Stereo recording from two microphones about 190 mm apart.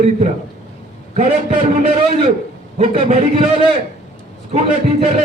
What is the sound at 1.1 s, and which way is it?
Speech, 40° right (ahead or behind).